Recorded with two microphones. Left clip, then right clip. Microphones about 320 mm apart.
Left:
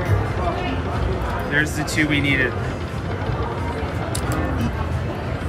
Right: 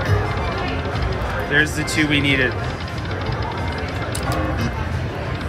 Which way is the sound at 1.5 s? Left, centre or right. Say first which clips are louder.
Right 3 dB; centre.